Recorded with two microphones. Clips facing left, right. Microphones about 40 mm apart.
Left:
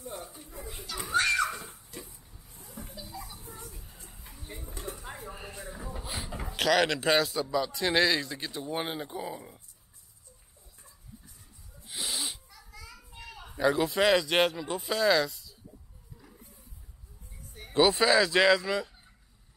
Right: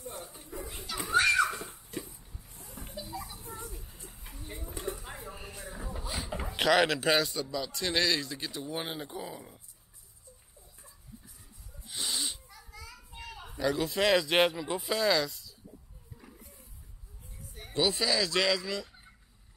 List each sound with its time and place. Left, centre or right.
0.7 s children playing: centre
2.0 s vehicle: centre
2.9 s a sound: centre
6.3 s a man's voice: centre
11.9 s a sound: centre
12.5 s children playing: centre
13.6 s speech: centre
13.8 s a man's voice: centre
17.4 s a sound: centre
17.7 s a man's voice: left
18.2 s a man's voice: left